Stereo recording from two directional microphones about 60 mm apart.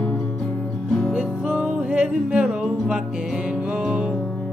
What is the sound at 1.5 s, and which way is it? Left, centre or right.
Music, right.